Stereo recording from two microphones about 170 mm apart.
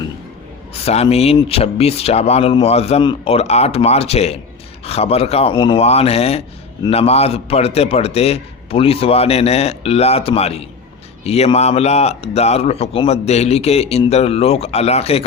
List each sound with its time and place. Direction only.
0.7 s a man's voice: 35° left (ahead or behind)